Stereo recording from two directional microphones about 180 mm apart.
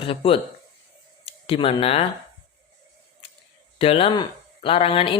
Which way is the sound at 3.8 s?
30° left (ahead or behind).